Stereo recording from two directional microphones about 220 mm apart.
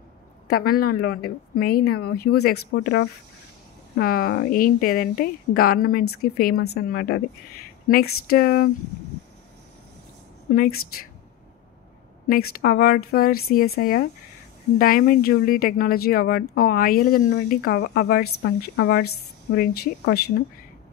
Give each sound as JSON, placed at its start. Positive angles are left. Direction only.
{"t": 0.5, "sound": "speech", "side_deg": 40}
{"t": 10.5, "sound": "speech", "side_deg": 40}
{"t": 12.3, "sound": "speech", "side_deg": 45}